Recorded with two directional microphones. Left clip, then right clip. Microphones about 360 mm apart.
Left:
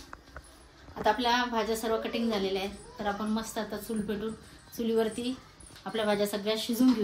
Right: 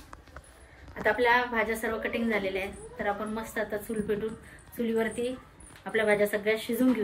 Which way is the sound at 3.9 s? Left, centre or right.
Centre.